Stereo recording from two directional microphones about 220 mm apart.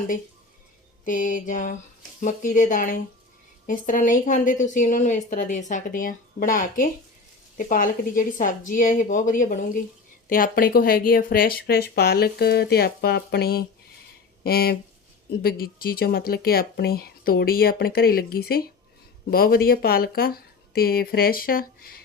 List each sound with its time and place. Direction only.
1.0 s a woman's voice: 35° left (ahead or behind)